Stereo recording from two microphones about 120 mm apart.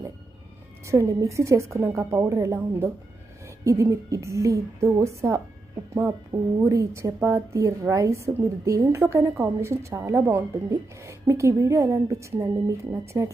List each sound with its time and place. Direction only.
0.9 s a woman's voice: 25° right (ahead or behind)